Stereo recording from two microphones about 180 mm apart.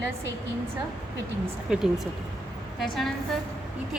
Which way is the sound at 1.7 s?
5° right (ahead or behind).